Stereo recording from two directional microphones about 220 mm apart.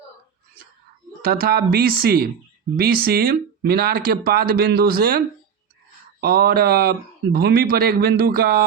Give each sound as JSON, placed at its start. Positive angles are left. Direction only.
{"t": 1.2, "sound": "speech", "side_deg": -40}